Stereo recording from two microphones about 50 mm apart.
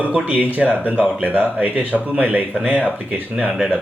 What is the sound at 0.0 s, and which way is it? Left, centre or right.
Speech, right.